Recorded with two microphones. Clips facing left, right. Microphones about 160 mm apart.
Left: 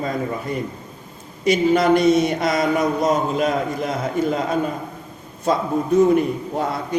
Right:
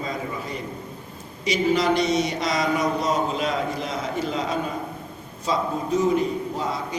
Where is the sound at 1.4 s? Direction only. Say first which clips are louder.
Left 5 dB; 55° left (ahead or behind).